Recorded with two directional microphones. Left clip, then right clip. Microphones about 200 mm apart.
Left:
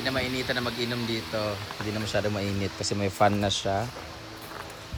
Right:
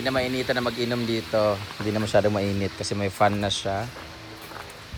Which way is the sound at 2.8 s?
10° left (ahead or behind).